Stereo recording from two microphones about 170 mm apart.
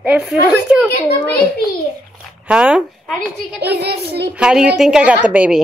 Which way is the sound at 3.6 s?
75° right (ahead or behind).